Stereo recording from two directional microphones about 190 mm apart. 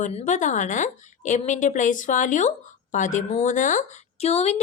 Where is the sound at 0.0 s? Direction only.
40° left (ahead or behind).